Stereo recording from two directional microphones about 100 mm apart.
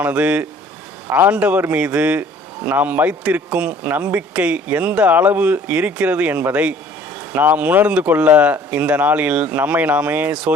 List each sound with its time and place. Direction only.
0.0 s a man's voice: 15° right (ahead or behind)